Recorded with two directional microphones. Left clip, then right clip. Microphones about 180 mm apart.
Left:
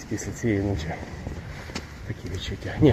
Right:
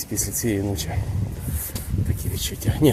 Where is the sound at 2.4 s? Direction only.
25° right (ahead or behind).